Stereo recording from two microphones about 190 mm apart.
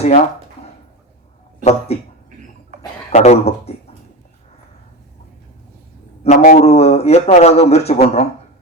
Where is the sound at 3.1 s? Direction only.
35° left (ahead or behind).